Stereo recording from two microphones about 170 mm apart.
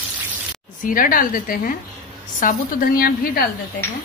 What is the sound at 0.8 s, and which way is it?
A woman's voice, 55° left (ahead or behind).